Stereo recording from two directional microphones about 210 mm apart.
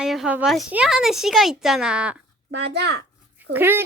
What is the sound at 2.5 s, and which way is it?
Speech, 55° right (ahead or behind).